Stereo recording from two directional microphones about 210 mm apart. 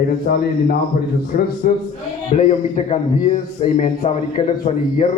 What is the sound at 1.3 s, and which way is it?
A man's voice, 35° left (ahead or behind).